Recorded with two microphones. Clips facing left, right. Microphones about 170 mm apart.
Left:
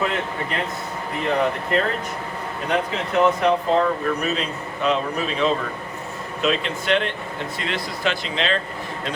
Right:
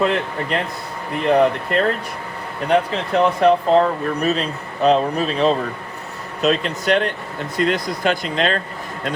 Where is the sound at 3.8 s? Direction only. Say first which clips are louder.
Right 3 dB; 35° right (ahead or behind).